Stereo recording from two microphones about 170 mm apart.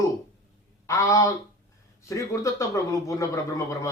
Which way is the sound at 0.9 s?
20° left (ahead or behind).